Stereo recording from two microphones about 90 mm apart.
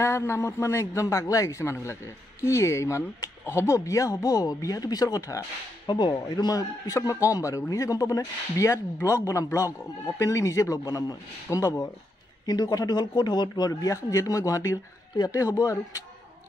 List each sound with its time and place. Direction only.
0.0 s a man's voice: 30° left (ahead or behind)
5.9 s a man's voice: 50° left (ahead or behind); by 11.9 s 35° left (ahead or behind)
12.4 s speech: 45° left (ahead or behind)